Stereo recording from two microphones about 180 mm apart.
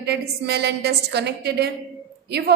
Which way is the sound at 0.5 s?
65° right (ahead or behind).